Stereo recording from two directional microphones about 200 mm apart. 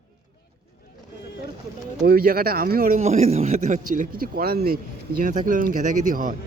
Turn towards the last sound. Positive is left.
turn(degrees=-40)  # may be behind; listen again after turning